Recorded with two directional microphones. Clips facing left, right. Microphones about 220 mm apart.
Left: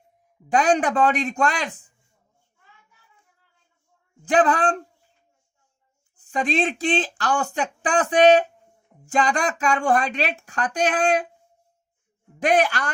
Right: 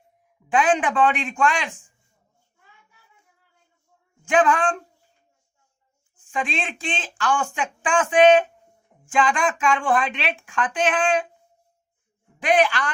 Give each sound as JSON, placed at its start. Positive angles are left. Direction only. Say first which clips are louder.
{"t": 0.5, "sound": "speech", "louder": "left 1 dB", "side_deg": 40}
{"t": 4.3, "sound": "speech", "louder": "even", "side_deg": 35}
{"t": 6.1, "sound": "speech", "louder": "left 5 dB", "side_deg": 40}
{"t": 12.4, "sound": "speech", "louder": "even", "side_deg": 40}